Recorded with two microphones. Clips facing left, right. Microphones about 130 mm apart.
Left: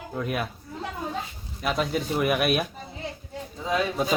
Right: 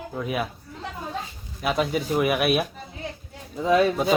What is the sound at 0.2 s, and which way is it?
Speech, centre (ahead or behind).